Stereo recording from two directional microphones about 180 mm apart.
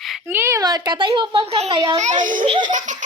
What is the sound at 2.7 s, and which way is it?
Laughter, 45° right (ahead or behind).